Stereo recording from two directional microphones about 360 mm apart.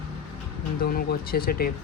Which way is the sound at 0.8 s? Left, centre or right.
Left.